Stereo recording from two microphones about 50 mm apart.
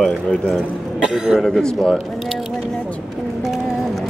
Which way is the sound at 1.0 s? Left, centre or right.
Centre.